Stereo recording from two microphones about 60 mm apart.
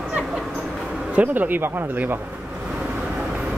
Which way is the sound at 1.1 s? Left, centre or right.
Right.